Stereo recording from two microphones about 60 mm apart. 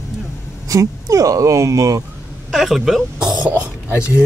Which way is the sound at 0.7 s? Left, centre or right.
Right.